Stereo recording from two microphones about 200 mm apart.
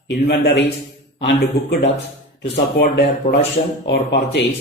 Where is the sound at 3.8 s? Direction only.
60° left (ahead or behind).